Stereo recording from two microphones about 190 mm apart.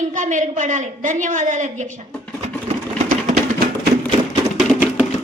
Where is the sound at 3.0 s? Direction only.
45° right (ahead or behind).